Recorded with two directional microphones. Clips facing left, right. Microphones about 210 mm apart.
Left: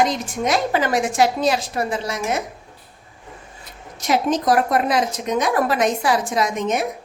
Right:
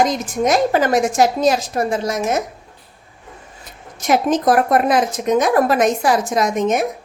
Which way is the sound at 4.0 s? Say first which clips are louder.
Right 3 dB; 50° right (ahead or behind).